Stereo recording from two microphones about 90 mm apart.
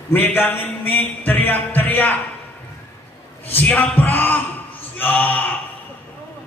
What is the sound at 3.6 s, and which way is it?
A man's voice, 20° left (ahead or behind).